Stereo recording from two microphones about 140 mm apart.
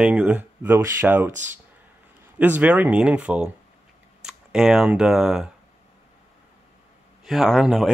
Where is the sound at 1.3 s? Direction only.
60° right (ahead or behind).